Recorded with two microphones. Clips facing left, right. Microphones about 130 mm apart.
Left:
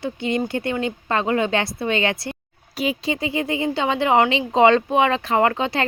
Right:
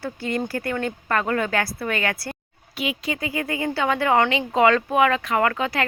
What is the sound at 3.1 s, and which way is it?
Speech, 25° left (ahead or behind).